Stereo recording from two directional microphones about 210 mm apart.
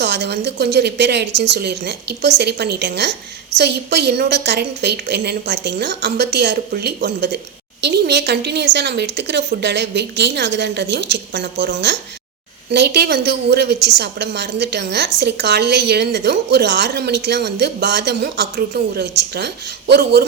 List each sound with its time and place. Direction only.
0.0 s a woman's voice: 50° right (ahead or behind)